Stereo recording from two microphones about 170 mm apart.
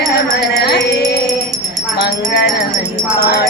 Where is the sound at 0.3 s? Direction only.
75° left (ahead or behind).